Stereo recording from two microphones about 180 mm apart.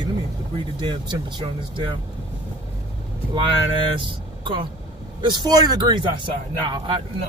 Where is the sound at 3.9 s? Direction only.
30° right (ahead or behind).